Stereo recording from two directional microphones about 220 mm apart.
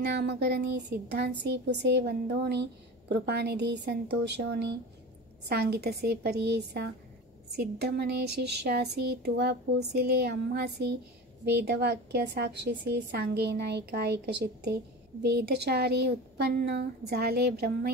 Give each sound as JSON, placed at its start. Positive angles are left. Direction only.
{"t": 0.0, "sound": "speech", "side_deg": -50}